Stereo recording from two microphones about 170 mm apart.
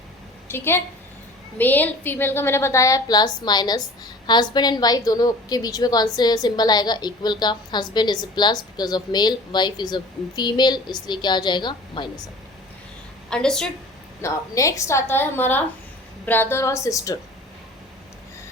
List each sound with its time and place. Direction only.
0.4 s a woman's voice: 15° left (ahead or behind)
13.3 s a woman's voice: 5° left (ahead or behind)
14.2 s a woman's voice: 15° left (ahead or behind)